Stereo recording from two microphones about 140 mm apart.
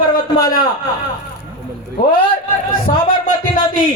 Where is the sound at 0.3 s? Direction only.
90° left.